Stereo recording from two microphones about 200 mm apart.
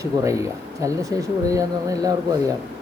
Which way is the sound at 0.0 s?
15° right (ahead or behind).